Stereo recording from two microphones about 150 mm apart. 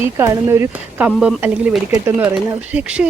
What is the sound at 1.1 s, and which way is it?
Speech, 5° right (ahead or behind).